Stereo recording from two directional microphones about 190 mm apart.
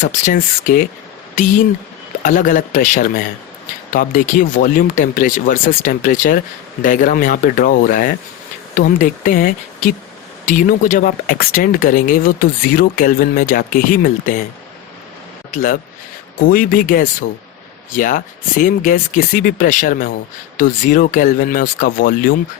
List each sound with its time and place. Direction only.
0.0 s speech: 40° left (ahead or behind)
2.2 s speech: 45° left (ahead or behind)
15.5 s speech: 45° left (ahead or behind)